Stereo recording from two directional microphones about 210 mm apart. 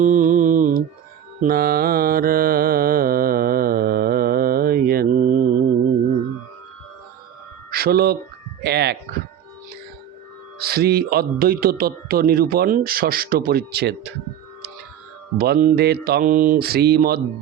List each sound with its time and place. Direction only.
0.0 s mantra: 40° right (ahead or behind)
7.7 s a man's voice: 45° right (ahead or behind)
10.6 s a man's voice: 45° right (ahead or behind)
15.4 s a man's voice: 45° right (ahead or behind)